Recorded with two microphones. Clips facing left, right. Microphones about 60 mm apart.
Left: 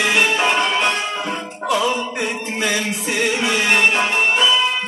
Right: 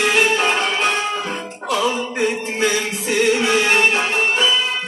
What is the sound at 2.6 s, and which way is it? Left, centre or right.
Music, centre.